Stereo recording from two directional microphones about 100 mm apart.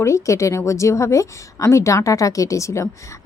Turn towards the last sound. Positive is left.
turn(degrees=30)  # may be behind; listen again after turning